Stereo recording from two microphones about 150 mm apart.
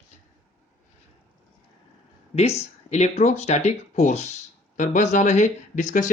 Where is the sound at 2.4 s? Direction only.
45° left (ahead or behind).